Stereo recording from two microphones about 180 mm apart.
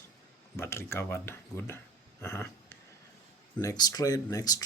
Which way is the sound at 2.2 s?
15° left (ahead or behind).